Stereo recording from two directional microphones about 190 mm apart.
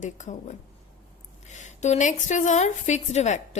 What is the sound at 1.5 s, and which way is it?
A woman's voice, 40° left (ahead or behind).